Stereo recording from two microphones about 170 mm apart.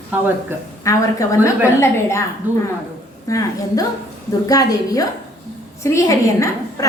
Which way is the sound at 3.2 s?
20° left (ahead or behind).